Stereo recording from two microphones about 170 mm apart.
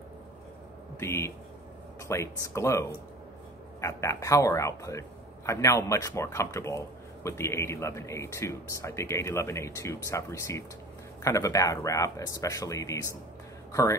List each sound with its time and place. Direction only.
0.9 s speech: 15° left (ahead or behind)